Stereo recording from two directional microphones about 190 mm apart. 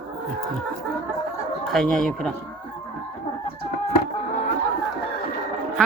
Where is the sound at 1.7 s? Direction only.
5° left (ahead or behind).